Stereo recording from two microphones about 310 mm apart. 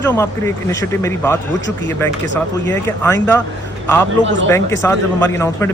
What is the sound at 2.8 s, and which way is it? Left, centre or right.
Speech, centre.